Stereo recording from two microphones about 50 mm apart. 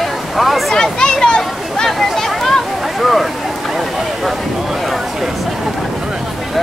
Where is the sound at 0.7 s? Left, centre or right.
Centre.